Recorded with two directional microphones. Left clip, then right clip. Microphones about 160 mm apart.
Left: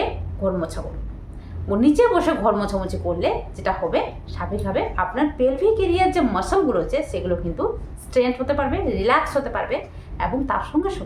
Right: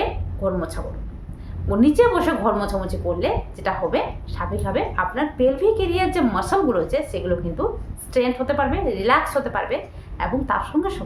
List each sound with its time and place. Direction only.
0.4 s a woman's voice: 5° right (ahead or behind)